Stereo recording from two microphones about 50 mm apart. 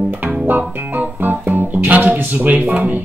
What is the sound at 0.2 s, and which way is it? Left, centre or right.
Music, right.